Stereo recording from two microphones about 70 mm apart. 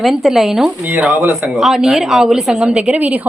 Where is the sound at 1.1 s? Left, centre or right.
Right.